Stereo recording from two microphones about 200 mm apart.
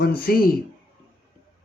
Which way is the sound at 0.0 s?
50° left (ahead or behind).